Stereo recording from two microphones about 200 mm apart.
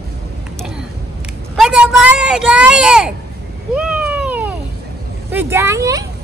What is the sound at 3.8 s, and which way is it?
Cat, 5° right (ahead or behind).